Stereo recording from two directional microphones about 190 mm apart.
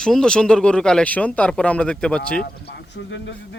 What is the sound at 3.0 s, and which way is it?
Speech, 70° left (ahead or behind).